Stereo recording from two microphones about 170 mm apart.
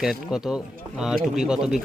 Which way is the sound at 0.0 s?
5° right (ahead or behind).